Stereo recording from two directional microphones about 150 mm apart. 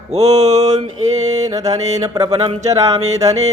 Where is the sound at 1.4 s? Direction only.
25° right (ahead or behind).